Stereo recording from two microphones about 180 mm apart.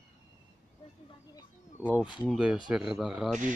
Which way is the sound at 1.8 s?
5° right (ahead or behind).